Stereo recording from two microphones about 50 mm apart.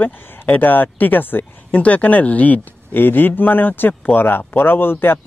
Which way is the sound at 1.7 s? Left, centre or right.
Left.